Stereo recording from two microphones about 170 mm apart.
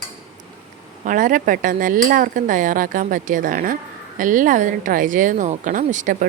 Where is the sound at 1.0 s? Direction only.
50° right (ahead or behind).